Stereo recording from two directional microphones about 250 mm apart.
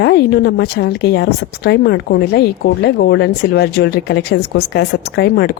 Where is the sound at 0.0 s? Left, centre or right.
Left.